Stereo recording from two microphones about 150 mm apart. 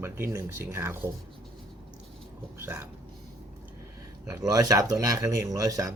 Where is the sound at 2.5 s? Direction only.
15° right (ahead or behind).